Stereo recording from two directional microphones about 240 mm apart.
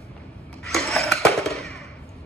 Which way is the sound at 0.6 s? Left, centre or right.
Centre.